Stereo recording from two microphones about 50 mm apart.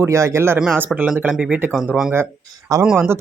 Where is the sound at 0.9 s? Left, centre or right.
Centre.